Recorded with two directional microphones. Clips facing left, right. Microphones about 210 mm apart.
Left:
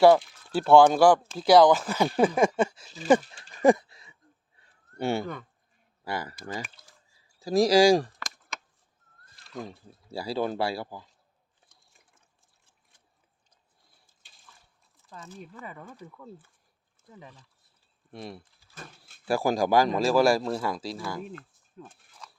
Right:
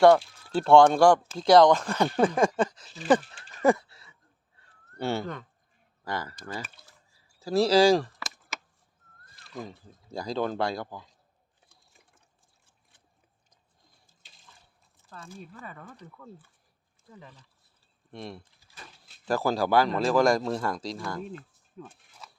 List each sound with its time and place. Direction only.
0.5 s speech: 5° left (ahead or behind)
3.5 s a sound: 15° left (ahead or behind)
6.1 s speech: 10° left (ahead or behind)
9.5 s speech: 5° left (ahead or behind)
15.4 s speech: 15° left (ahead or behind)
18.1 s speech: 5° left (ahead or behind)
18.7 s speech: 50° left (ahead or behind)
19.2 s speech: 10° left (ahead or behind)